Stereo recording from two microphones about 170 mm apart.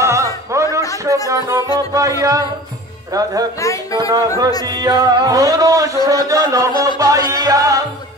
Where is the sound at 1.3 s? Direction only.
20° right (ahead or behind).